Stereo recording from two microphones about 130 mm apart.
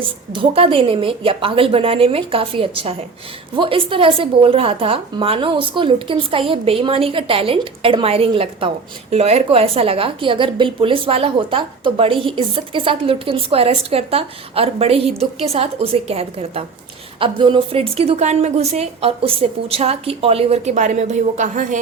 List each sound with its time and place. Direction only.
0.0 s a woman's voice: 45° right (ahead or behind); by 21.8 s 80° right